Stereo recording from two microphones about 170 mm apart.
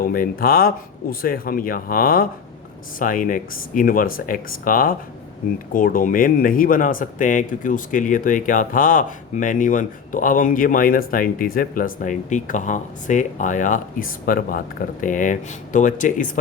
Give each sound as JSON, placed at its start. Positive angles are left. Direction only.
{"t": 0.0, "sound": "a man's voice", "side_deg": 55}